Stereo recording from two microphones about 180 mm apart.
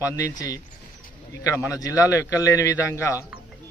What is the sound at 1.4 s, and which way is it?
A man's voice, 15° left (ahead or behind).